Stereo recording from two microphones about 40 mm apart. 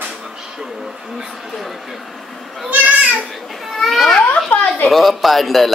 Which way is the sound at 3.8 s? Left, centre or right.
Centre.